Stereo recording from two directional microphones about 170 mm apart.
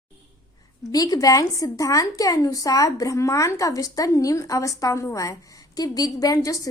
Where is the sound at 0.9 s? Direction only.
20° left (ahead or behind).